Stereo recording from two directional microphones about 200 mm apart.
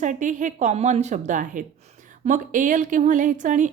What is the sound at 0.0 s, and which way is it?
A woman's voice, 40° right (ahead or behind).